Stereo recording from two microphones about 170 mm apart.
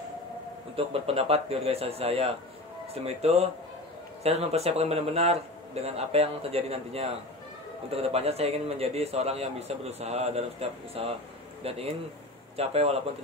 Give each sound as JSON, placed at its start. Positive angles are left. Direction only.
{"t": 0.7, "sound": "a man's voice", "side_deg": -35}